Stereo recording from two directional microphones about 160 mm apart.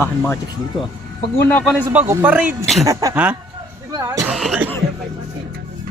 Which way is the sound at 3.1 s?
5° right (ahead or behind).